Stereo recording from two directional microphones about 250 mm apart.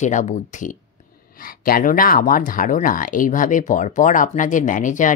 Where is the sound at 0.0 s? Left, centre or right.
Left.